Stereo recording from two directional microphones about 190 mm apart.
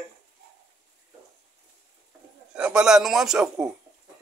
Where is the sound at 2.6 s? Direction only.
5° right (ahead or behind).